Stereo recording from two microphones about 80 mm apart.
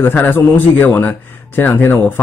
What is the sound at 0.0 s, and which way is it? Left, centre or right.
A man's voice, left.